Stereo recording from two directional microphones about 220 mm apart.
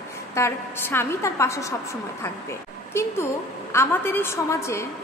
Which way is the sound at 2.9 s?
10° left (ahead or behind).